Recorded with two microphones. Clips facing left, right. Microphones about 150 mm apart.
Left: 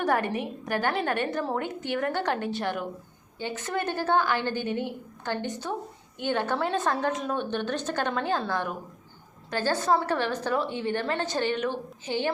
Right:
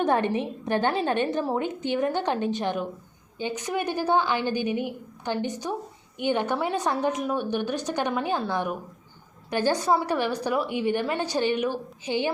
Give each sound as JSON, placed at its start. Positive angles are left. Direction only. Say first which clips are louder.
{"t": 0.0, "sound": "a woman's voice", "louder": "right 3 dB", "side_deg": -25}